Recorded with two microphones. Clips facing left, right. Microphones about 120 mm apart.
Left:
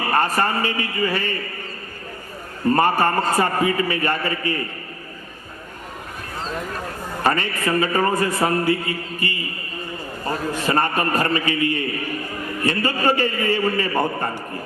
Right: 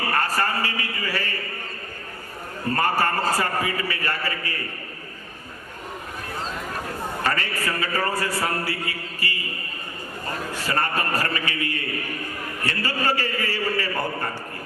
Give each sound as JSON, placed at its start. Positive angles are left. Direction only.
{"t": 0.1, "sound": "a man's voice", "side_deg": 20}
{"t": 2.6, "sound": "a man's voice", "side_deg": 25}
{"t": 7.3, "sound": "a man's voice", "side_deg": 20}
{"t": 10.5, "sound": "a man's voice", "side_deg": 20}